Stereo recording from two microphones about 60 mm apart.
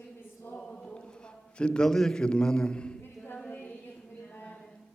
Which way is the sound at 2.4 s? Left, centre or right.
Centre.